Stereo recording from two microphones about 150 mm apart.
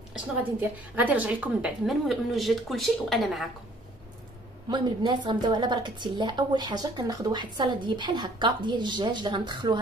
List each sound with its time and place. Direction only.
0.4 s a woman's voice: 10° right (ahead or behind)
4.6 s a woman's voice: 30° right (ahead or behind)